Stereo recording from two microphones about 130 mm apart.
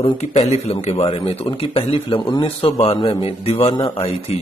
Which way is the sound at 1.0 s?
45° left (ahead or behind).